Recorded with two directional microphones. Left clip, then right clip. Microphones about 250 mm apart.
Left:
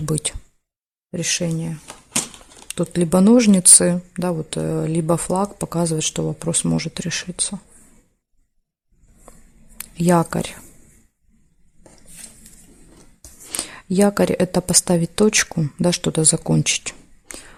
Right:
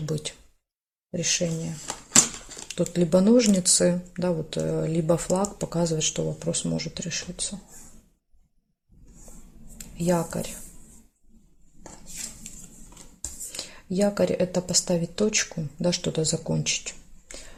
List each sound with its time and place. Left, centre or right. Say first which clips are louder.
0.0 s speech: left 6 dB; left
2.6 s speech: left 4 dB; left
9.7 s speech: left 8 dB; left
13.5 s speech: left 9 dB; left